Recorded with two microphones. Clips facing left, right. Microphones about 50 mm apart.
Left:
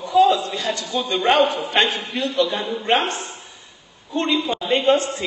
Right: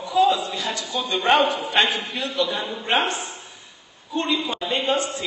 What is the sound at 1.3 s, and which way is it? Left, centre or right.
Speech, right.